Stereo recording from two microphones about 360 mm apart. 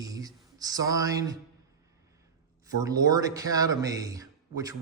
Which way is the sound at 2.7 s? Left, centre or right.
Centre.